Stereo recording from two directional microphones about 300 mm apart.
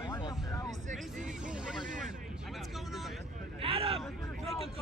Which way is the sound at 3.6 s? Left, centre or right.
Centre.